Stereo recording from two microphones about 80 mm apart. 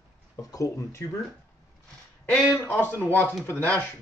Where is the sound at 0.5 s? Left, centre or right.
Left.